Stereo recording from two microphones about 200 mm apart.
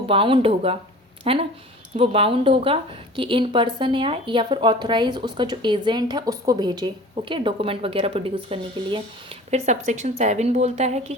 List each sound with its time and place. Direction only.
0.1 s speech: 25° right (ahead or behind)